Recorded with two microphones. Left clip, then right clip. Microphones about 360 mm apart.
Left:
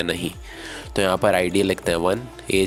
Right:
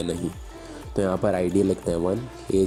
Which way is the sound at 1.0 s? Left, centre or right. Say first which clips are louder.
Left 5 dB; left.